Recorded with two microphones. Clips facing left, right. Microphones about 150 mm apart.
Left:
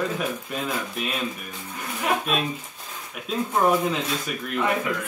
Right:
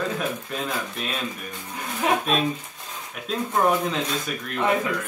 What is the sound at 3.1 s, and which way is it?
Speech, 5° left (ahead or behind).